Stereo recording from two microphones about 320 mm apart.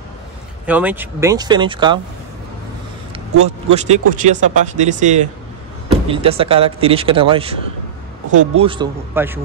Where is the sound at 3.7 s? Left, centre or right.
Right.